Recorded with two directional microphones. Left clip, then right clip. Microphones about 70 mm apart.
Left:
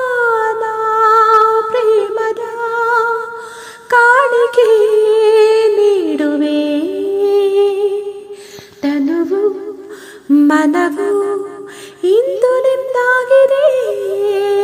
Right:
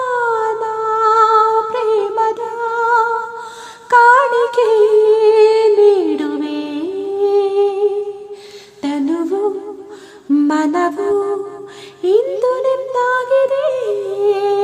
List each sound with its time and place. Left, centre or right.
0.0 s humming: left
3.8 s humming: centre
5.0 s humming: left
7.2 s humming: left
10.4 s music: left